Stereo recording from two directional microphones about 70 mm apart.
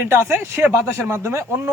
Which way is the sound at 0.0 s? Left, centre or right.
Right.